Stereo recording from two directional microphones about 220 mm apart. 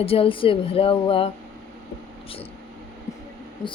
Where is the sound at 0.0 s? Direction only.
25° left (ahead or behind).